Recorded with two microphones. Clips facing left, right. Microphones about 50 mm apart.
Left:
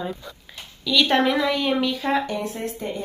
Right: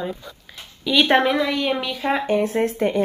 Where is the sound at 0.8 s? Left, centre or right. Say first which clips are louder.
Right 3 dB; right.